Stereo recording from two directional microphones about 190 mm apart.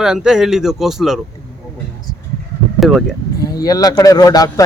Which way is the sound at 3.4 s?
20° left (ahead or behind).